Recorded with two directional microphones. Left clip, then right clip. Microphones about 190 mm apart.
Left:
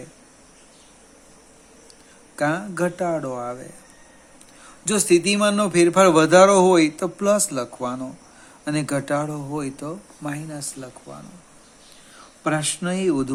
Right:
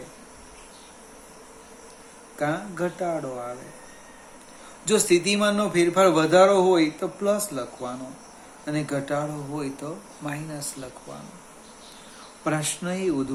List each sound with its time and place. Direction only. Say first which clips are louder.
2.4 s speech: left 4 dB; 55° left (ahead or behind)
4.9 s speech: left 2 dB; 50° left (ahead or behind)
12.5 s speech: left 3 dB; 40° left (ahead or behind)